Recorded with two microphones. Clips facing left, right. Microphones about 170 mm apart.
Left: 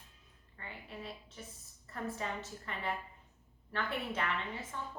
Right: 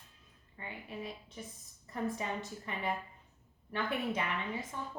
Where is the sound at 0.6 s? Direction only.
15° right (ahead or behind).